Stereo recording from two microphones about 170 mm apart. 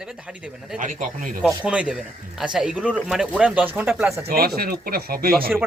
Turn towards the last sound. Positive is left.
turn(degrees=-60)  # may be behind; listen again after turning